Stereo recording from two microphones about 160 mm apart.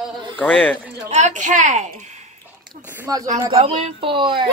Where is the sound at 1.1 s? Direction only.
50° right (ahead or behind).